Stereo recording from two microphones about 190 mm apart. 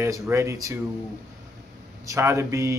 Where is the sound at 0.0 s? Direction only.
15° right (ahead or behind).